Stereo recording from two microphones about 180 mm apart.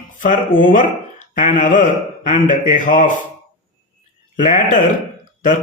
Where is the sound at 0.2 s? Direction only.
50° left (ahead or behind).